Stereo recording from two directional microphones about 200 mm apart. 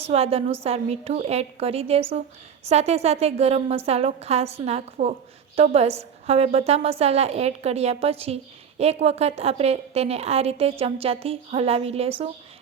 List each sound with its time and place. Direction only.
0.0 s a woman's voice: 30° right (ahead or behind)